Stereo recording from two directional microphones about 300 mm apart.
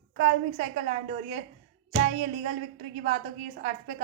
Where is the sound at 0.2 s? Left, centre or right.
Right.